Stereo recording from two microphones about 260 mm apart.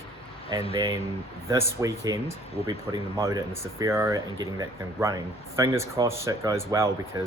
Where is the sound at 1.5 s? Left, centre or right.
Centre.